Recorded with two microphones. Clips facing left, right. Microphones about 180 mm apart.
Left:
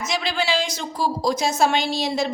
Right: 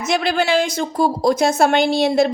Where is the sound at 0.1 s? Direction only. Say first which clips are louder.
Right 7 dB; 55° right (ahead or behind).